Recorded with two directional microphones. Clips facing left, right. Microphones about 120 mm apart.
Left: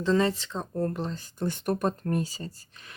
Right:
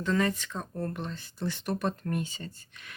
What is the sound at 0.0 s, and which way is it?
A woman's voice, 30° left (ahead or behind).